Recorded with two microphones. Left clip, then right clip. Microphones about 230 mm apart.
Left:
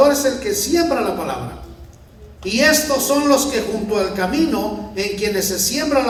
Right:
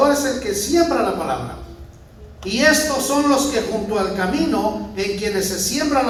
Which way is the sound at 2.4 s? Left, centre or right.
Left.